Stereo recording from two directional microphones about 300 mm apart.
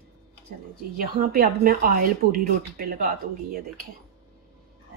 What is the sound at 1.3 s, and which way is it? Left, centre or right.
Speech, right.